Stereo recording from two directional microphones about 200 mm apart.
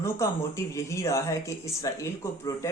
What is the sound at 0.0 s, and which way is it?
Speech, 15° left (ahead or behind).